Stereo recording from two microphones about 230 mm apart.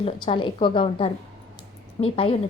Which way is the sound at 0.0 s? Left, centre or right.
Left.